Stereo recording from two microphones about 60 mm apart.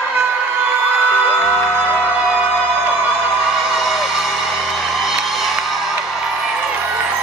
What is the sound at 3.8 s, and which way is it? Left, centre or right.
Music, centre.